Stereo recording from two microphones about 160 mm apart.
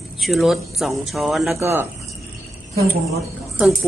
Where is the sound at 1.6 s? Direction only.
15° right (ahead or behind).